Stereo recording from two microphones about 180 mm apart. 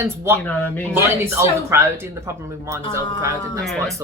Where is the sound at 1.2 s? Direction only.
15° right (ahead or behind).